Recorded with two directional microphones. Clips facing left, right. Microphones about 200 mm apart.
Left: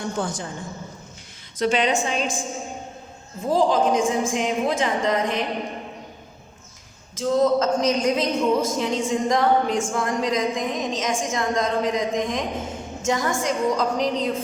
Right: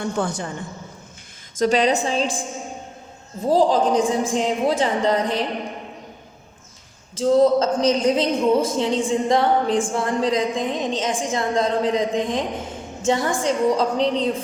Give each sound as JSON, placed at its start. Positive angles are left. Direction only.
{"t": 0.2, "sound": "a woman's voice", "side_deg": -60}
{"t": 1.5, "sound": "a woman's voice", "side_deg": -40}
{"t": 3.4, "sound": "a woman's voice", "side_deg": -35}
{"t": 7.2, "sound": "a woman's voice", "side_deg": -30}